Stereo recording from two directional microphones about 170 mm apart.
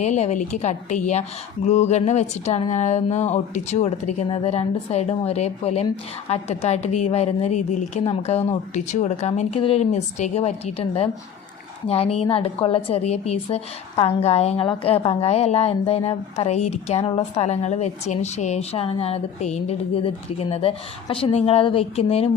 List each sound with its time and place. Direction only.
0.0 s a woman's voice: 45° left (ahead or behind)